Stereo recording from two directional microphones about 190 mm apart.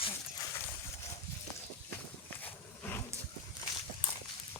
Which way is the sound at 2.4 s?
10° left (ahead or behind).